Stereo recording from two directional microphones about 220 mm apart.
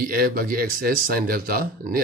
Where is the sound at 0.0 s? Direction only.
40° right (ahead or behind).